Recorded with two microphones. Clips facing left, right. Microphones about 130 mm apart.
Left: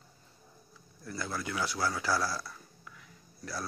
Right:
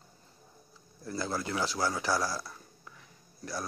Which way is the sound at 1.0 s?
30° right (ahead or behind).